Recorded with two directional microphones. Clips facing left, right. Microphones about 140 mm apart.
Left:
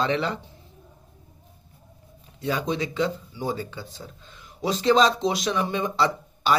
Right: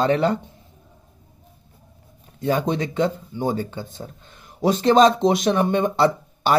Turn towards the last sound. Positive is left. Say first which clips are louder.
# right 5 dB
turn(degrees=-50)  # may be behind; listen again after turning